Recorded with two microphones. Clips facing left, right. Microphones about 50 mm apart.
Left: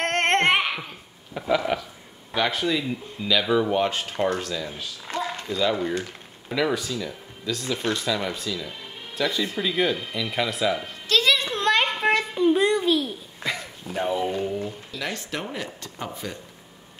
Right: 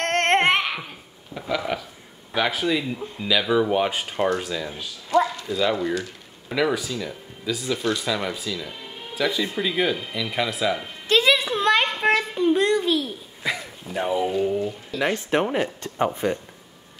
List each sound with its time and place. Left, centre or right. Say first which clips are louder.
0.0 s babbling: right 1 dB; centre
1.6 s speech: left 1 dB; centre
11.1 s music: right 3 dB; centre
11.4 s babbling: right 2 dB; centre
14.4 s a sound: right 5 dB; centre
15.0 s speech: right 9 dB; right